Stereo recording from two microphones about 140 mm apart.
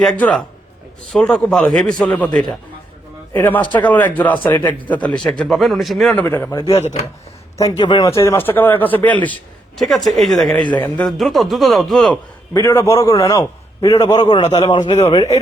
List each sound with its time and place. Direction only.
0.0 s a man's voice: 5° left (ahead or behind)
3.3 s a man's voice: 15° left (ahead or behind)
6.2 s speech: 15° left (ahead or behind)
6.7 s speech: 50° left (ahead or behind)
7.6 s speech: 30° left (ahead or behind); by 9.4 s 10° left (ahead or behind)
9.7 s a man's voice: centre (ahead or behind)
11.2 s a man's voice: centre (ahead or behind)
12.5 s a man's voice: 20° left (ahead or behind)